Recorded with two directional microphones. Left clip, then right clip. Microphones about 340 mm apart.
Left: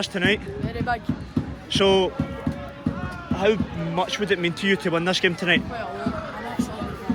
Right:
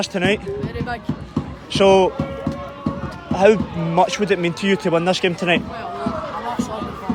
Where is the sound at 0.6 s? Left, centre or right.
Centre.